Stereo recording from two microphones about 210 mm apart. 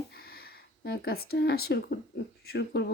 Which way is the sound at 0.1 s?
45° left (ahead or behind).